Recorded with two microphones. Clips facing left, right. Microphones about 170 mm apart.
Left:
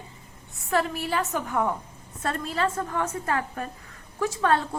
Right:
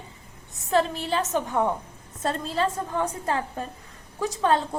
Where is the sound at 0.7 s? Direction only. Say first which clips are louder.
Right 2 dB; 25° right (ahead or behind).